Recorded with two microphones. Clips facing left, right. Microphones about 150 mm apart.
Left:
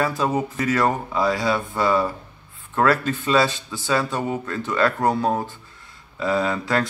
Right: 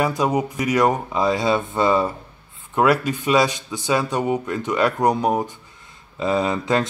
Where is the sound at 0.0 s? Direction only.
15° right (ahead or behind).